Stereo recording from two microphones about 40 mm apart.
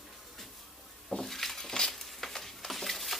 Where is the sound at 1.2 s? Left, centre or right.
Centre.